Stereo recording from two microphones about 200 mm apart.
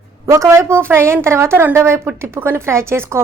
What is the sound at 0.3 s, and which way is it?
A woman's voice, 15° right (ahead or behind).